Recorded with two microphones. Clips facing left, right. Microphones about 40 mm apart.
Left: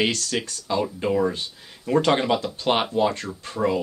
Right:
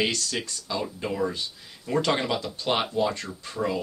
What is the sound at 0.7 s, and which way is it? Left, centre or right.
Speech, centre.